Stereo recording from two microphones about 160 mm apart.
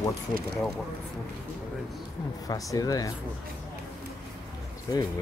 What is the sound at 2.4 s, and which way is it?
Speech, 20° left (ahead or behind).